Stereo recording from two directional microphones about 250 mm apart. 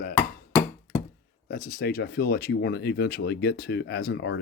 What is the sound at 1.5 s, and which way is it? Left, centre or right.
Speech, left.